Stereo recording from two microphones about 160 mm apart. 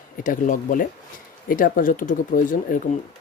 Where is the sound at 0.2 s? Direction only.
55° left (ahead or behind).